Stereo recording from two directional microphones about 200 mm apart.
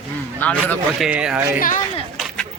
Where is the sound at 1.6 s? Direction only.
40° left (ahead or behind).